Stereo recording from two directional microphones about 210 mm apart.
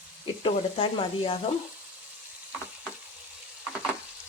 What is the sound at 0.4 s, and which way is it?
Speech, 25° left (ahead or behind).